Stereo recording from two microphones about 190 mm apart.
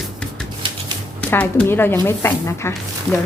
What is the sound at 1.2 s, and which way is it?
Speech, 10° left (ahead or behind).